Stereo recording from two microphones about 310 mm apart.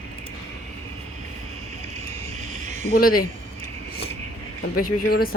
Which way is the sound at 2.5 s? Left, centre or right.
Right.